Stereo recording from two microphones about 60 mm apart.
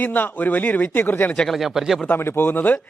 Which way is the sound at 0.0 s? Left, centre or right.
Left.